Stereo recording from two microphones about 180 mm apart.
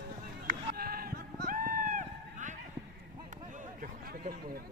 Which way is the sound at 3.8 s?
55° right (ahead or behind).